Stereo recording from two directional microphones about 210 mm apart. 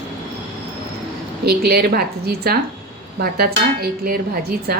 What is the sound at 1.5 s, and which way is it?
A woman's voice, 50° right (ahead or behind).